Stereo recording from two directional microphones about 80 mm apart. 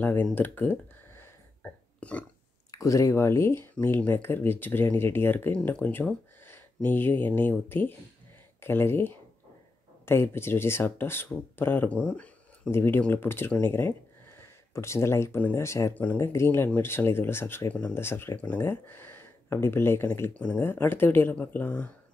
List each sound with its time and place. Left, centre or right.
0.0 s a sound: left
2.7 s speech: left; by 12.7 s centre
12.7 s speech: left
15.9 s speech: left
16.2 s speech: left
20.3 s speech: centre